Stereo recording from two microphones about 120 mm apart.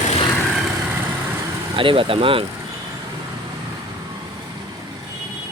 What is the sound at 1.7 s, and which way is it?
Speech, 45° right (ahead or behind).